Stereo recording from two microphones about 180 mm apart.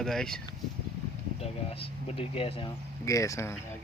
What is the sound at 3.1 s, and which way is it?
Speech, 15° left (ahead or behind).